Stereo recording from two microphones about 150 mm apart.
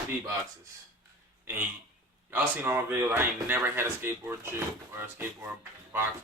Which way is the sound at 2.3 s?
15° right (ahead or behind).